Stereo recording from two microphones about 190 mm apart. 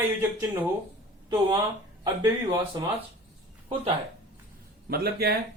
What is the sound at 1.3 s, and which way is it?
Speech, 25° right (ahead or behind).